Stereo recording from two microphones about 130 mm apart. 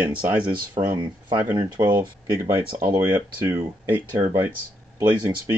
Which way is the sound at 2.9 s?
15° right (ahead or behind).